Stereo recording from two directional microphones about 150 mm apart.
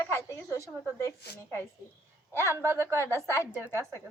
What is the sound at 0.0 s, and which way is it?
A woman's voice, 20° left (ahead or behind).